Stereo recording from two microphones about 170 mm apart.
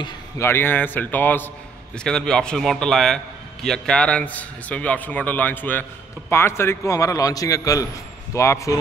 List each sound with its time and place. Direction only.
0.4 s a man's voice: 15° left (ahead or behind)